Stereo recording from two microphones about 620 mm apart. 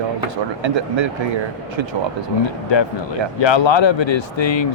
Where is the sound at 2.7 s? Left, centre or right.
Left.